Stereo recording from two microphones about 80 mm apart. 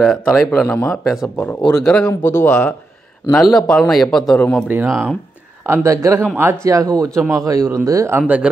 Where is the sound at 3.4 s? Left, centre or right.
Centre.